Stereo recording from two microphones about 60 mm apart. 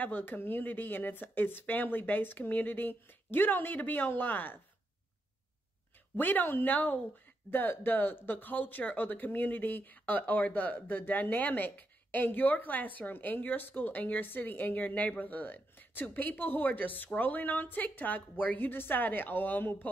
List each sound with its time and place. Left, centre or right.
0.0 s speech: left
6.1 s speech: left